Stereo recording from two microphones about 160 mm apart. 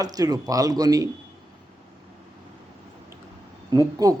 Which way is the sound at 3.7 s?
20° right (ahead or behind).